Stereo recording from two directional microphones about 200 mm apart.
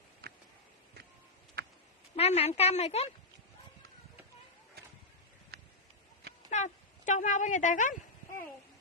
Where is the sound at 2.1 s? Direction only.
30° left (ahead or behind).